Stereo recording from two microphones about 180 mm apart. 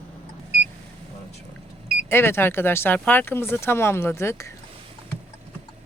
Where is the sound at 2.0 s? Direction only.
15° left (ahead or behind).